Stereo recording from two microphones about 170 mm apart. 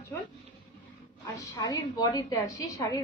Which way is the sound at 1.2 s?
20° left (ahead or behind).